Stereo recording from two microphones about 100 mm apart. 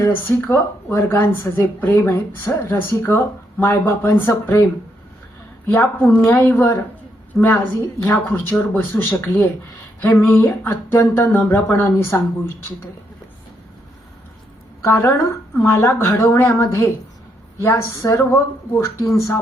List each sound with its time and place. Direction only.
0.0 s speech: 20° left (ahead or behind)
7.3 s a woman's voice: 5° left (ahead or behind)
8.0 s speech: 20° left (ahead or behind)
14.8 s speech: 25° left (ahead or behind)